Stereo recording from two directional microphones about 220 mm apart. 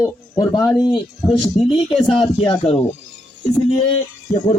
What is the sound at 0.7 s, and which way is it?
Speech, centre (ahead or behind).